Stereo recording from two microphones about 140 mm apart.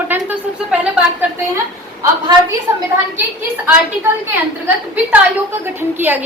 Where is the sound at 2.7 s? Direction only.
20° right (ahead or behind).